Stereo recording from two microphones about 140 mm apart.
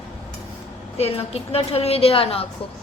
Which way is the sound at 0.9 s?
45° left (ahead or behind).